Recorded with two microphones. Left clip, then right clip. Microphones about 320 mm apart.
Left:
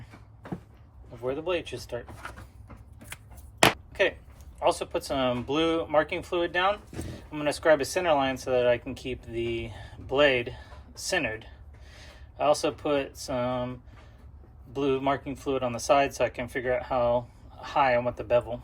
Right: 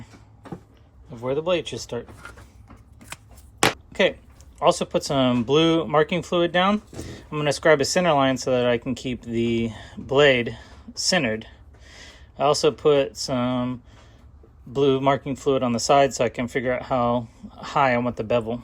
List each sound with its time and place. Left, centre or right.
1.3 s speech: right
3.9 s speech: right